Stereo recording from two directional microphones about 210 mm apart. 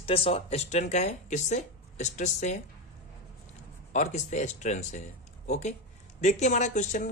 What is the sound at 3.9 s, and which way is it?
A man's voice, 35° left (ahead or behind).